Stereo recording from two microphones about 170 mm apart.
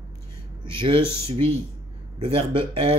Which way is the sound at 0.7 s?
30° right (ahead or behind).